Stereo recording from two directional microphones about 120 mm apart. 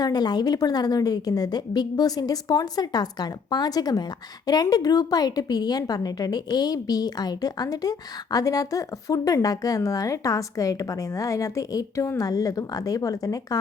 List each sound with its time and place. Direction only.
0.0 s a woman's voice: 35° left (ahead or behind)